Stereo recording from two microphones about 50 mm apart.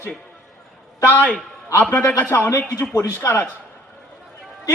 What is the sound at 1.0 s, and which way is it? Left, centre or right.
Speech, left.